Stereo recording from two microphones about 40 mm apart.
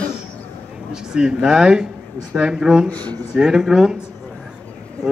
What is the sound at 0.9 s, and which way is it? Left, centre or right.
Speech, centre.